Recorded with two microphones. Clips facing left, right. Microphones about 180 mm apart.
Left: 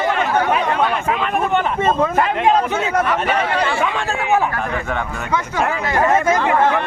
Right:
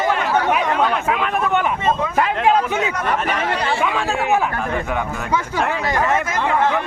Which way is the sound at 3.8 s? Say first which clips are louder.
Even; centre (ahead or behind).